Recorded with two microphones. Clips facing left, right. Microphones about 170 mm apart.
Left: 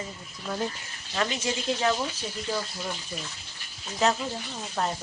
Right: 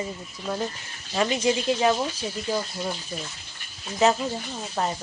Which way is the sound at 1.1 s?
15° right (ahead or behind).